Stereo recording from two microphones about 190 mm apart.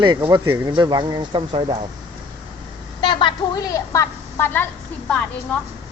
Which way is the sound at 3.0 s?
25° left (ahead or behind).